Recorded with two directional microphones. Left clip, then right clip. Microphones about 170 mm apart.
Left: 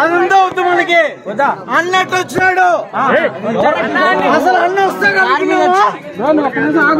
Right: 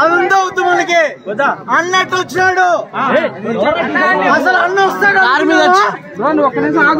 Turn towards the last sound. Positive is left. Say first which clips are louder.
# right 2 dB
turn(degrees=-25)  # may be behind; listen again after turning